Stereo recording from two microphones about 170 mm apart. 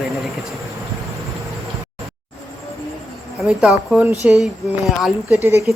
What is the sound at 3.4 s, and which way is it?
Speech, 5° right (ahead or behind).